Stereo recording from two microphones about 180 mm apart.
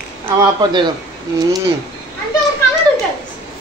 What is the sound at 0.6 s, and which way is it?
Speech, 25° right (ahead or behind).